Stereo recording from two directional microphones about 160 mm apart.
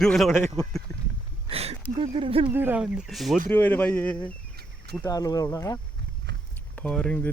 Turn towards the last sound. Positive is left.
turn(degrees=5)  # may be behind; listen again after turning